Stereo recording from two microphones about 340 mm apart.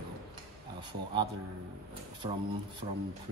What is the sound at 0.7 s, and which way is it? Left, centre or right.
Speech, centre.